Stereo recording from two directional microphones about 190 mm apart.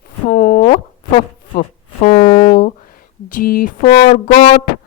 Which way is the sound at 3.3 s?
45° left (ahead or behind).